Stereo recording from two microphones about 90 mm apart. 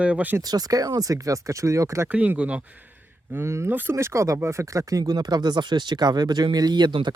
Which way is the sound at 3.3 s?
30° right (ahead or behind).